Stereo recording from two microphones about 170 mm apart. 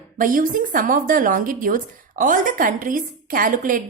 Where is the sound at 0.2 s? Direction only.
55° right (ahead or behind).